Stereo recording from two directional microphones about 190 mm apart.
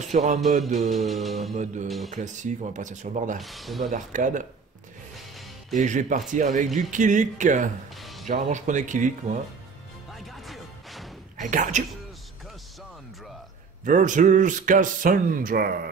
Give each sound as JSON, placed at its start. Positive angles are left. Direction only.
{"t": 0.1, "sound": "speech", "side_deg": -40}
{"t": 0.8, "sound": "mantra", "side_deg": 0}
{"t": 1.5, "sound": "speech", "side_deg": -40}
{"t": 3.3, "sound": "mantra", "side_deg": 0}
{"t": 3.9, "sound": "speech", "side_deg": -40}
{"t": 5.8, "sound": "speech", "side_deg": -40}
{"t": 8.0, "sound": "music", "side_deg": 0}
{"t": 8.3, "sound": "speech", "side_deg": -40}
{"t": 10.1, "sound": "music", "side_deg": 0}
{"t": 11.3, "sound": "speech", "side_deg": -40}
{"t": 13.8, "sound": "speech", "side_deg": -40}